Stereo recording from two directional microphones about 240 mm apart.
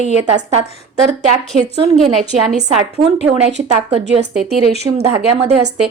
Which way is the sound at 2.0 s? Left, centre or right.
Centre.